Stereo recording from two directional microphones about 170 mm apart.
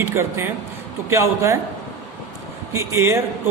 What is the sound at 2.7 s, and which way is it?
Speech, 15° right (ahead or behind).